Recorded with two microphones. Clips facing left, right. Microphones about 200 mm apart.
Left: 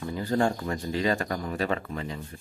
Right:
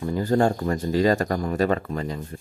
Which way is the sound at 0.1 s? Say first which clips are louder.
Right 5 dB; 45° right (ahead or behind).